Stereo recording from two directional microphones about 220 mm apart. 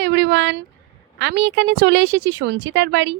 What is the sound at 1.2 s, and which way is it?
Speech, 50° right (ahead or behind).